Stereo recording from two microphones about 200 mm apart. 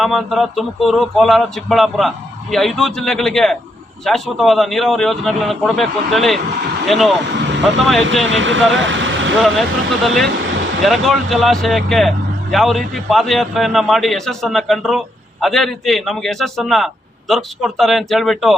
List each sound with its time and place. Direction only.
0.0 s speech: centre (ahead or behind)
8.3 s speech: 70° right (ahead or behind)
8.7 s vehicle: 70° right (ahead or behind)
9.4 s speech: centre (ahead or behind)